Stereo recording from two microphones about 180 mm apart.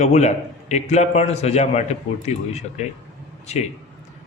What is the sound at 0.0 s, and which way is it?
A man's voice, 40° left (ahead or behind).